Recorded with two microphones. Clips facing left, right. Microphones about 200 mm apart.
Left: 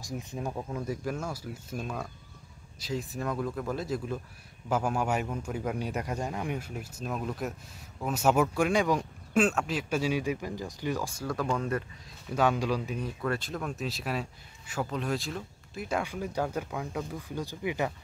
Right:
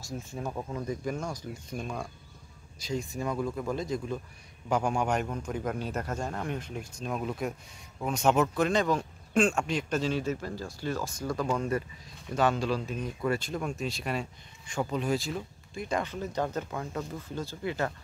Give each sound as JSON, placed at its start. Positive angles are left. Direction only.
{"t": 0.0, "sound": "speech", "side_deg": 15}
{"t": 0.4, "sound": "speech", "side_deg": 0}
{"t": 11.2, "sound": "speech", "side_deg": 0}
{"t": 12.5, "sound": "speech", "side_deg": 10}
{"t": 13.2, "sound": "speech", "side_deg": -5}